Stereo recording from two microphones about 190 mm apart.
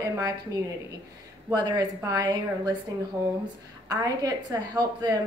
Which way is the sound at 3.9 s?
20° right (ahead or behind).